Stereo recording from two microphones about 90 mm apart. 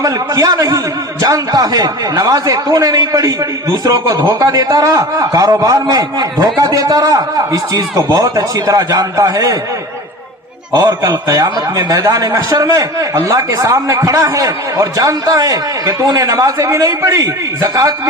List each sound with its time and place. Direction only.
0.0 s a man's voice: 45° right (ahead or behind)
10.7 s a man's voice: 45° right (ahead or behind)